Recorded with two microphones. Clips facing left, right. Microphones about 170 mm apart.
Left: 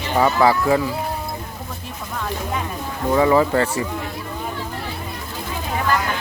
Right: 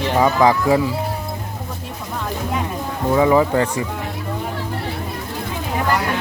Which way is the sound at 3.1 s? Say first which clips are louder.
Right 1 dB; 15° right (ahead or behind).